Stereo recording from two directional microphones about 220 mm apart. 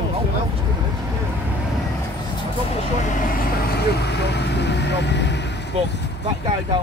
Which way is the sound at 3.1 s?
45° left (ahead or behind).